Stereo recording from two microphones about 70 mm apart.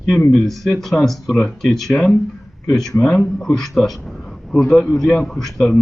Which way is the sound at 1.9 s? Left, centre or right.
Left.